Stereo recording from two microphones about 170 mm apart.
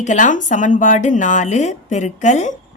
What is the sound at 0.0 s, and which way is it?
A woman's voice, 45° left (ahead or behind).